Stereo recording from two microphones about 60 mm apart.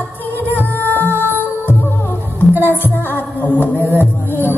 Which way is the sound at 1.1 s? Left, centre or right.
Right.